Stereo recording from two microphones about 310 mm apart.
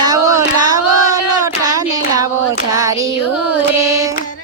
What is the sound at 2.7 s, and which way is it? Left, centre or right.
Carnatic music, centre.